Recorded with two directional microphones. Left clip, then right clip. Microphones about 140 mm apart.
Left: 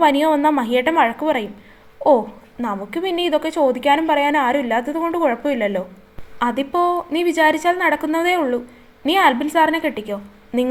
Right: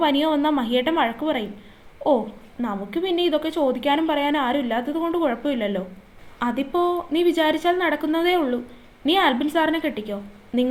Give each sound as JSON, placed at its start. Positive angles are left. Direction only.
{"t": 0.0, "sound": "a woman's voice", "side_deg": 50}